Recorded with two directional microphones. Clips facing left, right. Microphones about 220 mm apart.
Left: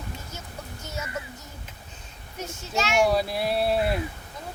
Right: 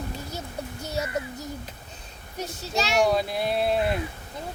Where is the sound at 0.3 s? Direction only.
35° right (ahead or behind).